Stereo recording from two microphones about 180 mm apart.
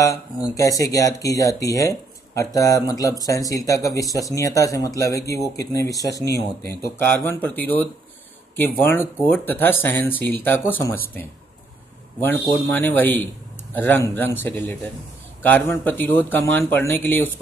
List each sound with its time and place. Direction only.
0.0 s speech: 20° left (ahead or behind)